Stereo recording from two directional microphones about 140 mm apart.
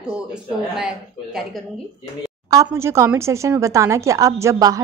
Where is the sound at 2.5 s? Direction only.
20° right (ahead or behind).